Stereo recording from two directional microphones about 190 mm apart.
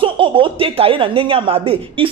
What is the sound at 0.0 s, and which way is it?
Speech, 25° right (ahead or behind).